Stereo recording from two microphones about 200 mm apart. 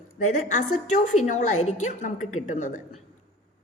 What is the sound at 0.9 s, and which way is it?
A woman's voice, 35° left (ahead or behind).